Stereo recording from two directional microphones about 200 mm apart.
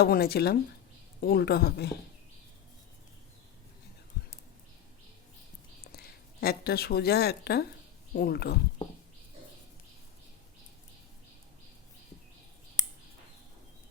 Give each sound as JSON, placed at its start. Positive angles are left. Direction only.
{"t": 0.0, "sound": "a woman's voice", "side_deg": 50}
{"t": 4.1, "sound": "a sound", "side_deg": 50}
{"t": 5.9, "sound": "a woman's voice", "side_deg": 50}